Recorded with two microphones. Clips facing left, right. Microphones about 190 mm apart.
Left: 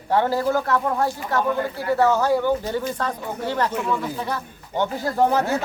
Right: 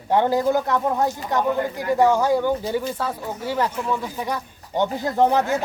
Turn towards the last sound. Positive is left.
turn(degrees=-20)  # may be behind; listen again after turning